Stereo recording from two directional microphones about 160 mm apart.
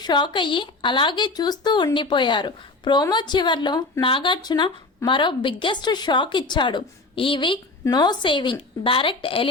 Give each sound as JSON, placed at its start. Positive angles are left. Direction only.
{"t": 0.0, "sound": "a woman's voice", "side_deg": 30}